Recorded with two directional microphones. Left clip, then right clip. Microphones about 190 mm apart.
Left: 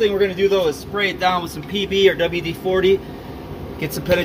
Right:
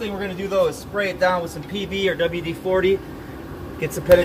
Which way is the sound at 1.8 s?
40° left (ahead or behind).